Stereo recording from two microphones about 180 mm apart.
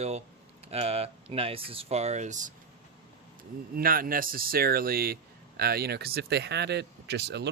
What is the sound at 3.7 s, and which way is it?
Speech, 50° right (ahead or behind).